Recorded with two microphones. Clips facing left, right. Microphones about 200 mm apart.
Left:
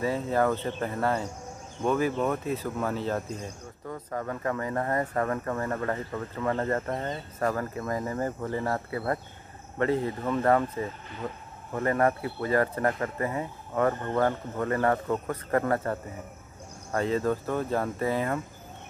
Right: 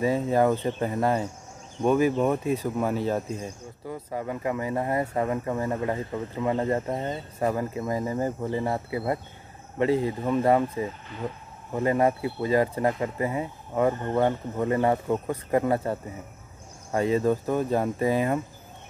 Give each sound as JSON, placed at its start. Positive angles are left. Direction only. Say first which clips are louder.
{"t": 0.0, "sound": "speech", "louder": "right 4 dB", "side_deg": -15}